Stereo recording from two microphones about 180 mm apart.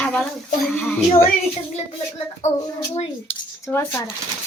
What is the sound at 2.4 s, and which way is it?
Speech, 40° left (ahead or behind).